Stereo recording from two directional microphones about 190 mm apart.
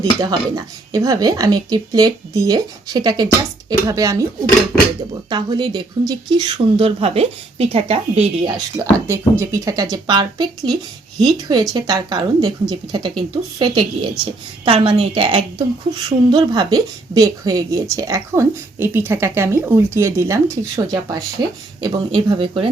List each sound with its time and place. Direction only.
0.0 s a woman's voice: 20° right (ahead or behind)
5.3 s speech: 25° right (ahead or behind)
8.8 s a woman's voice: 15° right (ahead or behind)